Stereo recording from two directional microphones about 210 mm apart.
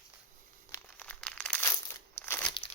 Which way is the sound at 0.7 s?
5° left (ahead or behind).